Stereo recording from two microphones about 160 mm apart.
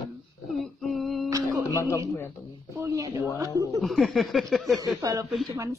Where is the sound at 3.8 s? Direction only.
Centre (ahead or behind).